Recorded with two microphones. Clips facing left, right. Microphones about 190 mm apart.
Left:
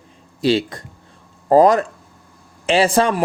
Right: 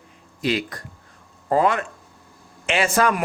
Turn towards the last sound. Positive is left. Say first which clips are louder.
# left 5 dB
turn(degrees=30)  # may be behind; listen again after turning